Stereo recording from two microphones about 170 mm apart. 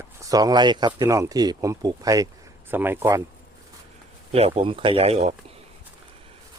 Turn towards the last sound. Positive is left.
turn(degrees=-40)  # may be behind; listen again after turning